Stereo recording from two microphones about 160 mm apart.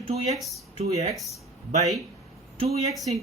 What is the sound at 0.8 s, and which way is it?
Speech, 45° right (ahead or behind).